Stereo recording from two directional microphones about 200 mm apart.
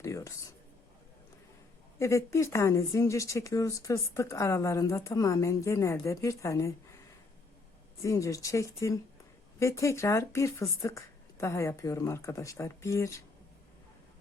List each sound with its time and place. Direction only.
0.0 s a sound: 15° left (ahead or behind)
2.0 s speech: 15° left (ahead or behind)
8.0 s speech: 15° left (ahead or behind)